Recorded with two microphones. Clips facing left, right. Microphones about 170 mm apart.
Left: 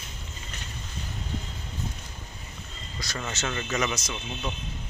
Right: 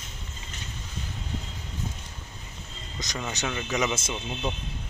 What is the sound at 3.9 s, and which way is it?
Speech, 25° right (ahead or behind).